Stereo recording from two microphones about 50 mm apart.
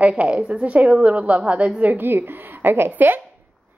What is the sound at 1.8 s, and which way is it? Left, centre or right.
A woman's voice, right.